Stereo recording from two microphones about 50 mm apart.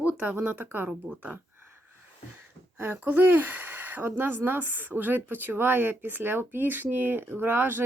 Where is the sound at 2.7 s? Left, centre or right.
Right.